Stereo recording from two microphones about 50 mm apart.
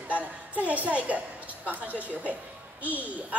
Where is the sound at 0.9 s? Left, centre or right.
Right.